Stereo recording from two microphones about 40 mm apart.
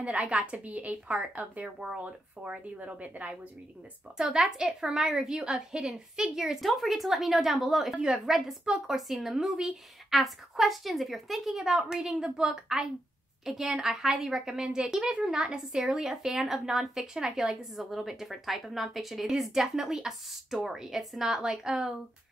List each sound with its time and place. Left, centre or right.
0.0 s a woman's voice: right
4.2 s a woman's voice: centre
6.6 s a woman's voice: centre
17.7 s a woman's voice: centre